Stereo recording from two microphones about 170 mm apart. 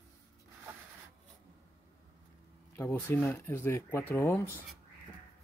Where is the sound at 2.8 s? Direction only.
15° left (ahead or behind).